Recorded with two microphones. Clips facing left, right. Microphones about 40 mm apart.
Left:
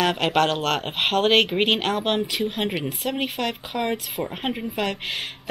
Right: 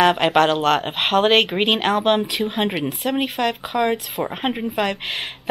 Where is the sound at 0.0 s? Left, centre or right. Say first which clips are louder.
Right 5 dB; centre.